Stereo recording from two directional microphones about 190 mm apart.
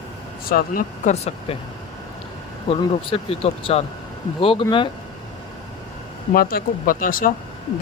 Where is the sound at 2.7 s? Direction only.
30° left (ahead or behind).